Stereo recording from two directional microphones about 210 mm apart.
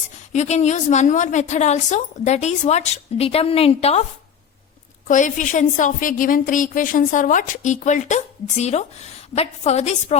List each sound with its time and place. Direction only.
0.3 s a woman's voice: 30° left (ahead or behind)
5.0 s a woman's voice: 35° left (ahead or behind)